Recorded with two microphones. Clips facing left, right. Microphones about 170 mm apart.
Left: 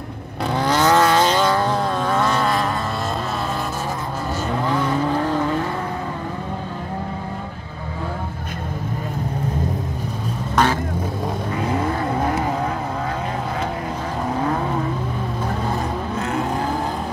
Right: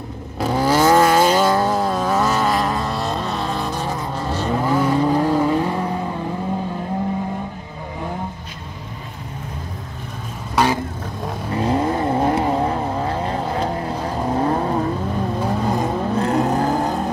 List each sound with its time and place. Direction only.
0.4 s vehicle: 10° right (ahead or behind)
4.6 s vehicle: 10° right (ahead or behind)
10.5 s vehicle: 10° right (ahead or behind)
11.9 s vehicle: 25° right (ahead or behind)
16.2 s vehicle: 35° right (ahead or behind)